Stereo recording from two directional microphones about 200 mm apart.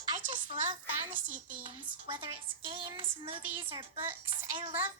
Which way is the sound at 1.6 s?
25° right (ahead or behind).